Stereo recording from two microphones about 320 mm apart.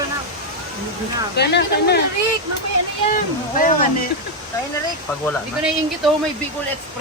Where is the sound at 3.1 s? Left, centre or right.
Left.